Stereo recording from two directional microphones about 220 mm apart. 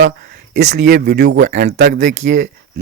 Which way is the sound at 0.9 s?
50° right (ahead or behind).